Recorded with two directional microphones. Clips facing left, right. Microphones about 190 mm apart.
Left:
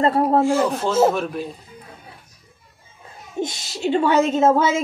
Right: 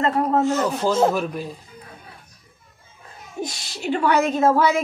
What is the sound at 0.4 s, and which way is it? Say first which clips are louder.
A woman's voice: left 2 dB; 10° left (ahead or behind).